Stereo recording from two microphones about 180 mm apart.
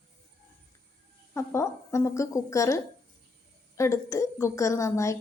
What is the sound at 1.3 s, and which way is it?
A woman's voice, 15° left (ahead or behind).